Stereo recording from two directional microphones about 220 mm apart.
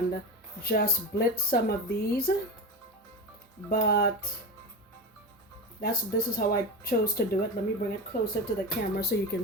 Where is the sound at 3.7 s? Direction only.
40° left (ahead or behind).